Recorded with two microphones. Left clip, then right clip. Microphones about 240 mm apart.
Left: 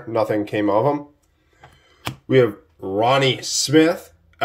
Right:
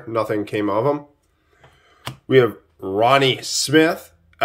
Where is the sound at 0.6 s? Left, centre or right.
Right.